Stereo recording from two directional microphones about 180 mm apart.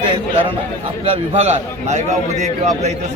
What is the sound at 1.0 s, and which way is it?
Speech, 40° right (ahead or behind).